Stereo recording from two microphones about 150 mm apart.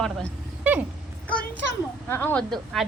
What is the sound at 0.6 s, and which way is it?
Dog, 10° right (ahead or behind).